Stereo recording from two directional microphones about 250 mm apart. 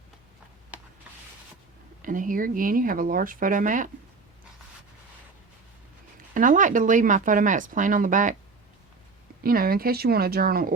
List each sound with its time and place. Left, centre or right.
2.0 s speech: right
6.3 s speech: right
9.4 s speech: right